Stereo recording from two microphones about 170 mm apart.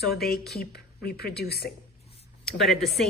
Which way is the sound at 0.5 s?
65° left (ahead or behind).